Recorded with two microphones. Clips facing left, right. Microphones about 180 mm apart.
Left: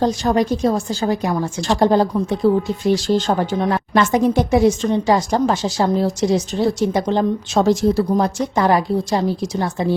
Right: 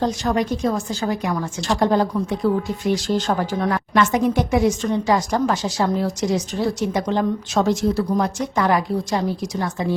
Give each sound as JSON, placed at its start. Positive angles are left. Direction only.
{"t": 0.0, "sound": "speech", "side_deg": 35}